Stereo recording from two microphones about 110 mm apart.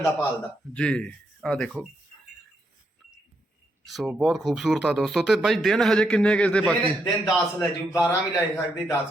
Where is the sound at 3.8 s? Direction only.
Centre (ahead or behind).